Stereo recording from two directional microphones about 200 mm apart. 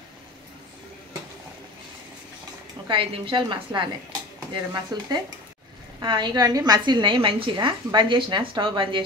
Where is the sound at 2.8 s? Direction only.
25° right (ahead or behind).